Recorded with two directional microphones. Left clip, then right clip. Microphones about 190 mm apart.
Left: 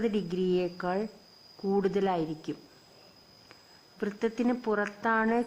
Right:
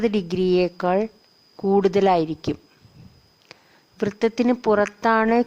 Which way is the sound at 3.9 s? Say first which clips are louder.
Right 9 dB; 40° right (ahead or behind).